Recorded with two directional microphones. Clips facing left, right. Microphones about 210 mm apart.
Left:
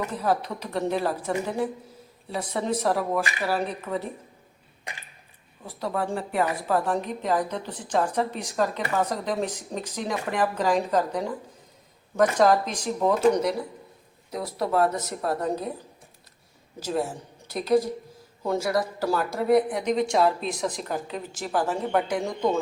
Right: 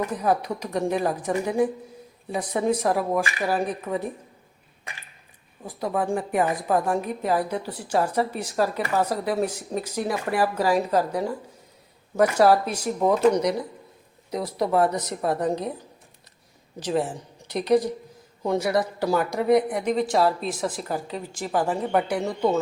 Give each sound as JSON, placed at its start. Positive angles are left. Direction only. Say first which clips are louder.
{"t": 0.0, "sound": "a woman's voice", "louder": "right 2 dB", "side_deg": -15}
{"t": 2.3, "sound": "a woman's voice", "louder": "right 4 dB", "side_deg": -15}
{"t": 5.6, "sound": "a woman's voice", "louder": "right 3 dB", "side_deg": -15}
{"t": 18.4, "sound": "a woman's voice", "louder": "right 2 dB", "side_deg": -20}